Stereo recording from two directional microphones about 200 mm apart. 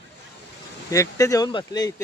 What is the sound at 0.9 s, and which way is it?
Speech, 15° left (ahead or behind).